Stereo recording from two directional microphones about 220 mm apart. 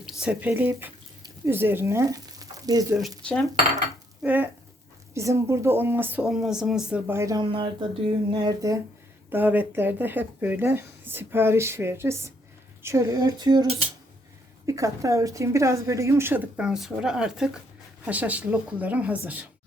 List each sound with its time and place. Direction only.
0.0 s speech: centre (ahead or behind)
3.2 s cutlery: 5° left (ahead or behind)
4.2 s speech: 10° right (ahead or behind)